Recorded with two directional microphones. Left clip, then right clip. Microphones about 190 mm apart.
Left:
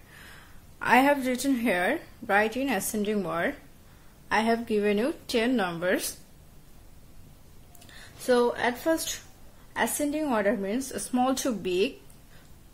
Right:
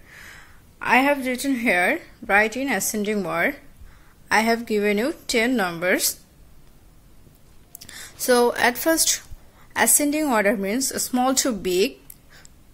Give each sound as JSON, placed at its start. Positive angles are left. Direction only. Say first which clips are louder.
{"t": 0.1, "sound": "a woman's voice", "louder": "right 6 dB", "side_deg": -10}
{"t": 7.8, "sound": "a woman's voice", "louder": "right 6 dB", "side_deg": -25}